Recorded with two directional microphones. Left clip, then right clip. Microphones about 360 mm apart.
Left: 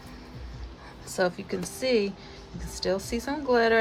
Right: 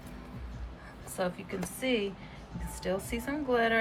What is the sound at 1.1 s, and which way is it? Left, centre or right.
Speech, centre.